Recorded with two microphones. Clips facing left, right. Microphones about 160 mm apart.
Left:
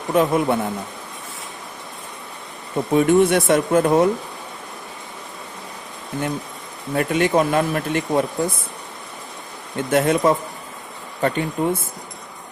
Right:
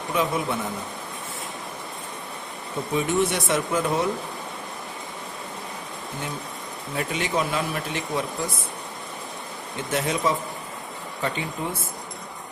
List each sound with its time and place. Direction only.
0.1 s speech: 55° left (ahead or behind)
2.9 s speech: 55° left (ahead or behind)
6.9 s speech: 55° left (ahead or behind)
9.7 s speech: 55° left (ahead or behind)